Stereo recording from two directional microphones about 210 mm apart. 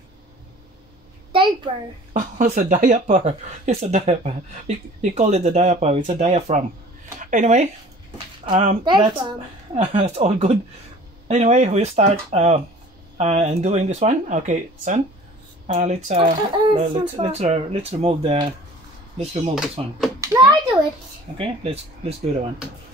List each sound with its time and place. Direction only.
1.3 s a sound: 25° right (ahead or behind)
2.1 s a woman's voice: 40° right (ahead or behind)
19.8 s a woman's voice: 30° right (ahead or behind)
20.2 s a child's voice: 15° right (ahead or behind)
21.4 s a woman's voice: 30° right (ahead or behind)